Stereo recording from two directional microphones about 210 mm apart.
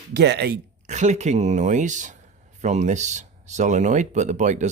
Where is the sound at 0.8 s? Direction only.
35° right (ahead or behind).